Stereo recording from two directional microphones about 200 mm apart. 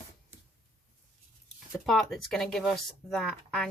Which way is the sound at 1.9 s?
Centre (ahead or behind).